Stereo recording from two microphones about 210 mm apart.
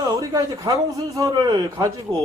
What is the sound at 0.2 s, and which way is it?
Speech, 15° right (ahead or behind).